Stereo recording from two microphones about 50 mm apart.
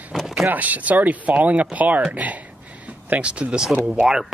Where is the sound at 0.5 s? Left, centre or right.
Right.